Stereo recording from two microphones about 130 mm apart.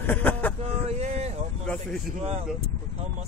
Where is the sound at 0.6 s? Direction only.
60° right (ahead or behind).